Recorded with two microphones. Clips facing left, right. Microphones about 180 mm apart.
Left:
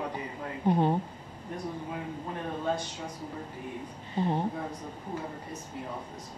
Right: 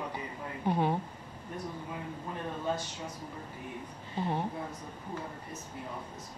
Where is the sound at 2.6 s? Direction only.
10° left (ahead or behind).